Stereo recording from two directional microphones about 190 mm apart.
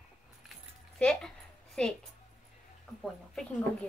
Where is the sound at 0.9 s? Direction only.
5° left (ahead or behind).